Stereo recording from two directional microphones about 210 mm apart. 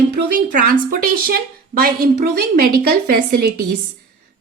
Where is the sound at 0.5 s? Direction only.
45° right (ahead or behind).